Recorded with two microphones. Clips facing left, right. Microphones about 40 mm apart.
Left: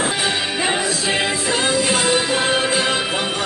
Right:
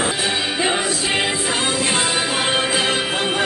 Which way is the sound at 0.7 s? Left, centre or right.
Centre.